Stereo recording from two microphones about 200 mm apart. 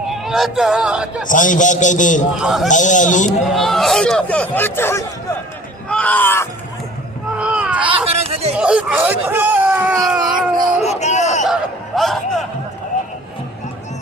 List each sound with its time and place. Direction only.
0.1 s speech: centre (ahead or behind)
1.3 s a man's voice: 40° left (ahead or behind)
2.4 s speech: centre (ahead or behind)
2.6 s a man's voice: 40° left (ahead or behind)
3.5 s speech: centre (ahead or behind)
7.3 s baby cry: 5° right (ahead or behind)
7.9 s speech: 30° right (ahead or behind)
8.5 s speech: 5° right (ahead or behind)
10.8 s speech: 35° left (ahead or behind)
11.4 s speech: centre (ahead or behind)